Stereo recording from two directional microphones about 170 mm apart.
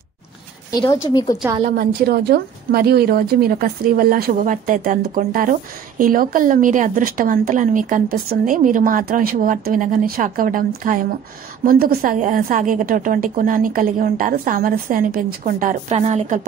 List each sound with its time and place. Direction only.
0.7 s speech: 20° left (ahead or behind)
1.6 s a woman's voice: 60° right (ahead or behind); by 16.3 s 40° right (ahead or behind)